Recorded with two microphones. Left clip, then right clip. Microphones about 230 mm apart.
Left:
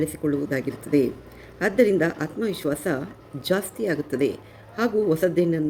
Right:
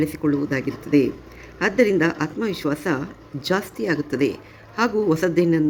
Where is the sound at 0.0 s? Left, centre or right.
Centre.